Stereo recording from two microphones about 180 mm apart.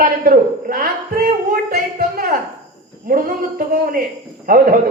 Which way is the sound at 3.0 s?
50° right (ahead or behind).